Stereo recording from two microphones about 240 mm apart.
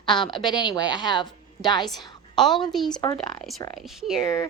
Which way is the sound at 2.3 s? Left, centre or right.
Centre.